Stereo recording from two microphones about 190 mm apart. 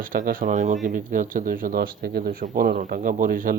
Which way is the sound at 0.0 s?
45° right (ahead or behind).